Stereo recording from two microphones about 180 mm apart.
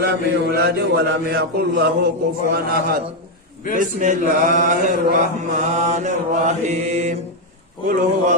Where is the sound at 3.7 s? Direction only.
45° right (ahead or behind).